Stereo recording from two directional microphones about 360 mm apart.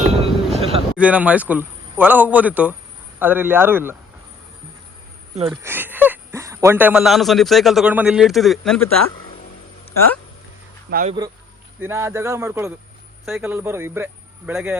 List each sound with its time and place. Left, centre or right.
0.2 s a sound: centre
0.9 s speech: centre
5.3 s speech: centre
5.6 s speech: centre
10.9 s speech: centre
11.8 s speech: centre